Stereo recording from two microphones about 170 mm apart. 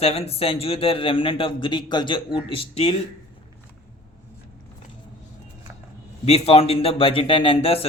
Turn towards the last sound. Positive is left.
turn(degrees=35)  # may be behind; listen again after turning